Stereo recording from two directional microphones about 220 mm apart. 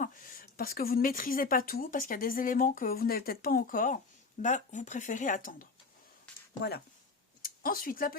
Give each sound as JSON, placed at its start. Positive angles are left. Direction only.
{"t": 0.0, "sound": "speech", "side_deg": 40}